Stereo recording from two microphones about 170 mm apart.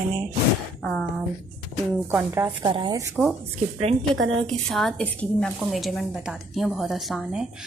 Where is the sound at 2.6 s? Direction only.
25° right (ahead or behind).